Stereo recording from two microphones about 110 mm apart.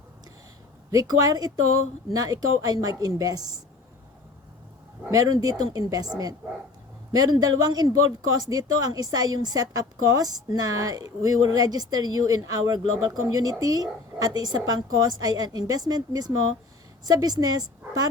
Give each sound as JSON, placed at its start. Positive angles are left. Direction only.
{"t": 0.9, "sound": "speech", "side_deg": -35}
{"t": 5.1, "sound": "speech", "side_deg": -35}